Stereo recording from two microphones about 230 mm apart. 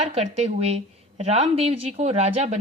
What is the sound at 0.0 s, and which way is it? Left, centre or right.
Speech, right.